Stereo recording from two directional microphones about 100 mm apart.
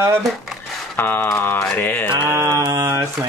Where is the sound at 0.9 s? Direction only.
20° left (ahead or behind).